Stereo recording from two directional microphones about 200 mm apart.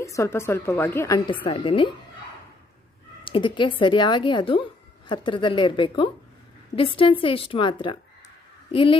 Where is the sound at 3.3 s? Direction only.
25° left (ahead or behind).